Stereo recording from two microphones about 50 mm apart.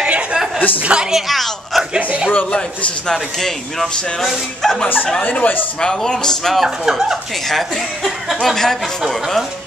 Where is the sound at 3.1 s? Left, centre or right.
Centre.